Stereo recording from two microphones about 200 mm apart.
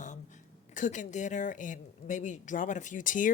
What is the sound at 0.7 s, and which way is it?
Speech, 40° left (ahead or behind).